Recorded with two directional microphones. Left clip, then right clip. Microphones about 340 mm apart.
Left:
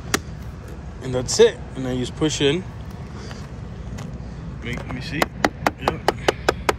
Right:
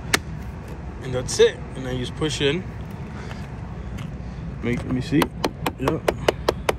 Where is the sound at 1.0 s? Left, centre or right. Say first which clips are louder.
Left 2 dB; centre.